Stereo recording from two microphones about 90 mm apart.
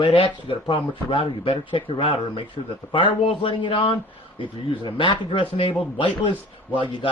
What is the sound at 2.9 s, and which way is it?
Speech, 70° left (ahead or behind).